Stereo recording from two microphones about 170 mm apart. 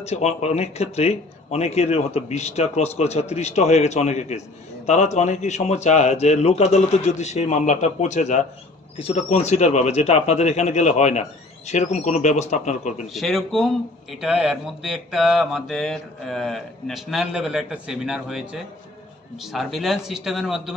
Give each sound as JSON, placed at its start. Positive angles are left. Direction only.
{"t": 0.0, "sound": "speech", "side_deg": 40}
{"t": 13.0, "sound": "mantra", "side_deg": 0}